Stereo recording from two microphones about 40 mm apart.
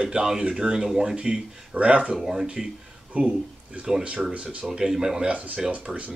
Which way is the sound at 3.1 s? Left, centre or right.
Right.